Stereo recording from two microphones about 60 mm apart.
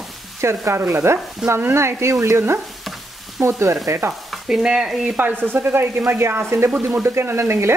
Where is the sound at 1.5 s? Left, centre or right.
Right.